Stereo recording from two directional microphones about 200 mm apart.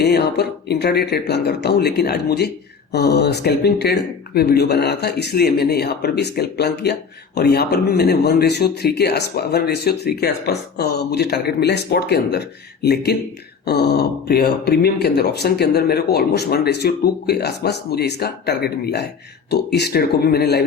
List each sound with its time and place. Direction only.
0.0 s speech: 55° left (ahead or behind)